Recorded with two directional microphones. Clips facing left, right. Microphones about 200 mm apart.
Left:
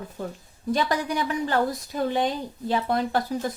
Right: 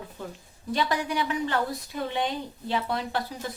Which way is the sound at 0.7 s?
40° left (ahead or behind).